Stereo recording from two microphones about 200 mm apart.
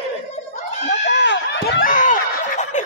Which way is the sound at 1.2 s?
55° left (ahead or behind).